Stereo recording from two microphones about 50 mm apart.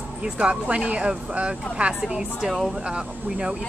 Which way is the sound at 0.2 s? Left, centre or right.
Right.